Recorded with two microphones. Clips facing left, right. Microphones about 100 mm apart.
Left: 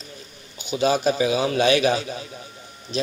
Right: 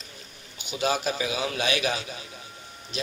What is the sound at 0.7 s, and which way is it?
A man's voice, 35° left (ahead or behind).